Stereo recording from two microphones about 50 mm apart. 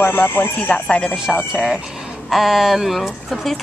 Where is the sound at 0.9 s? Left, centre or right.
Centre.